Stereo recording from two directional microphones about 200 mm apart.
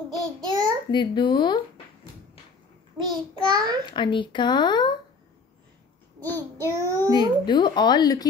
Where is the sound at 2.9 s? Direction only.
20° right (ahead or behind).